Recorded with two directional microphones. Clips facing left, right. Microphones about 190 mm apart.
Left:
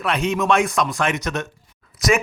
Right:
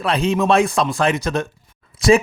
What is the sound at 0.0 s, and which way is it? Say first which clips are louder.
Speech: right 3 dB; 30° right (ahead or behind).